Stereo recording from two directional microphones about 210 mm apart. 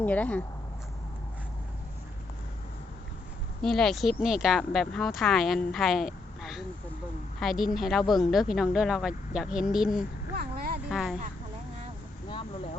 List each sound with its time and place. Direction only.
0.0 s speech: 5° left (ahead or behind)
3.6 s speech: centre (ahead or behind)
10.3 s vehicle: 45° right (ahead or behind)
10.8 s speech: centre (ahead or behind)